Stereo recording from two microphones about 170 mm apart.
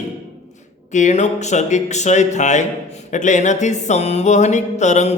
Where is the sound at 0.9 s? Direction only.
45° left (ahead or behind).